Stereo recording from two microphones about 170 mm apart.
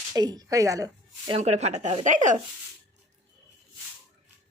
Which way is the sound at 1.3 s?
40° right (ahead or behind).